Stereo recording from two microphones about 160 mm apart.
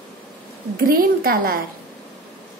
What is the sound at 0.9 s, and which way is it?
Speech, 65° right (ahead or behind).